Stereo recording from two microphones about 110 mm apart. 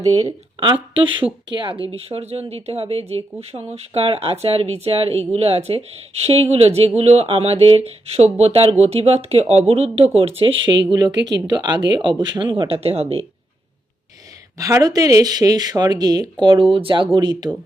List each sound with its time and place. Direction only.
0.6 s speech: 50° right (ahead or behind)
1.9 s speech: 65° right (ahead or behind)
10.2 s speech: 60° right (ahead or behind)
10.9 s speech: 40° right (ahead or behind)
12.6 s speech: 65° right (ahead or behind)
14.6 s speech: 30° right (ahead or behind)